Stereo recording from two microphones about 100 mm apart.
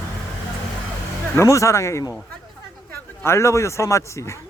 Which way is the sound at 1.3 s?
30° left (ahead or behind).